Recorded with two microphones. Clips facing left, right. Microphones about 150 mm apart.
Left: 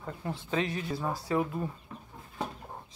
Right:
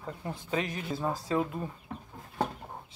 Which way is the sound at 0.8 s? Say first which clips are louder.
Right 1 dB; 20° right (ahead or behind).